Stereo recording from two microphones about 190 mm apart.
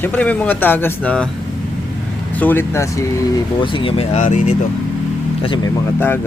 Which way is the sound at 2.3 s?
10° left (ahead or behind).